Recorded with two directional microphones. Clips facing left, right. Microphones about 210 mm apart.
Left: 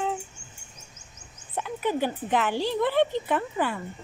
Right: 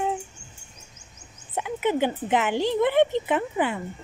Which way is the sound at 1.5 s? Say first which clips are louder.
Right 3 dB; 20° right (ahead or behind).